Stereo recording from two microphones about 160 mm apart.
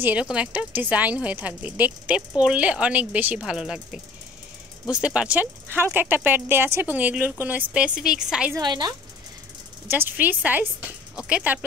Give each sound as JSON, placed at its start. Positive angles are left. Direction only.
{"t": 0.0, "sound": "a woman's voice", "side_deg": -10}
{"t": 8.5, "sound": "a woman's voice", "side_deg": -25}
{"t": 9.8, "sound": "speech", "side_deg": -10}